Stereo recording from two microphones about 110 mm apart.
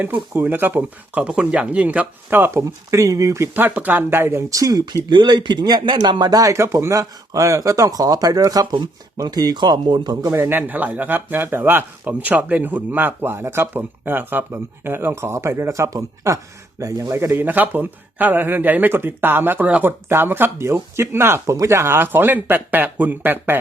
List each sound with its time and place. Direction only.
0.0 s speech: 15° right (ahead or behind); by 10.3 s 35° right (ahead or behind)
10.3 s a man's voice: 20° right (ahead or behind)